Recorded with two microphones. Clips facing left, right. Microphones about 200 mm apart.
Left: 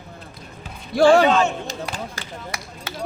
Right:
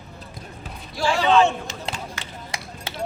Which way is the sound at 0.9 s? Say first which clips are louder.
Left 10 dB; 55° left (ahead or behind).